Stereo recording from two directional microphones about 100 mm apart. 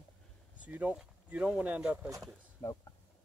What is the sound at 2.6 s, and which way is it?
Speech, 25° left (ahead or behind).